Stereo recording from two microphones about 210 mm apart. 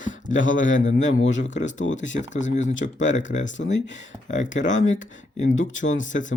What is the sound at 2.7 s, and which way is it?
Speech, 65° left (ahead or behind).